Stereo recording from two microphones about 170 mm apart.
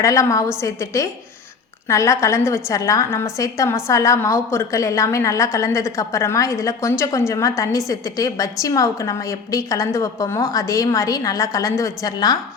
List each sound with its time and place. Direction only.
0.0 s a woman's voice: 20° left (ahead or behind)